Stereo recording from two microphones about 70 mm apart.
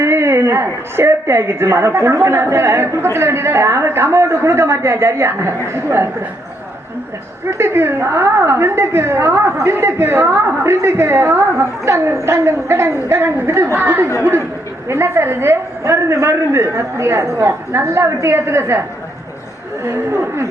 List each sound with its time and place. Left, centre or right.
0.0 s a woman's voice: right
7.6 s a woman's voice: right
19.9 s a woman's voice: right